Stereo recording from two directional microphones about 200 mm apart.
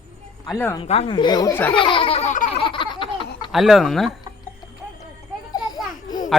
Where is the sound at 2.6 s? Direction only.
25° left (ahead or behind).